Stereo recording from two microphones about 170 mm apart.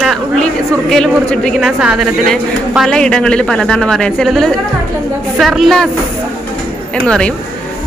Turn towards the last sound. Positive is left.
turn(degrees=5)  # may be behind; listen again after turning